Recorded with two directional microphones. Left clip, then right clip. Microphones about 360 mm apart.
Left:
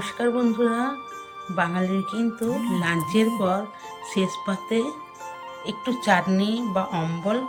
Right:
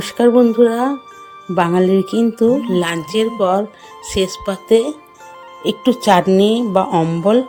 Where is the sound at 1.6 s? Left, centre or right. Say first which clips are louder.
Right 13 dB; centre.